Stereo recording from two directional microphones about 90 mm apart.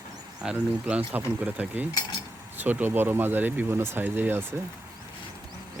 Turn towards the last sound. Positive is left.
turn(degrees=-25)  # may be behind; listen again after turning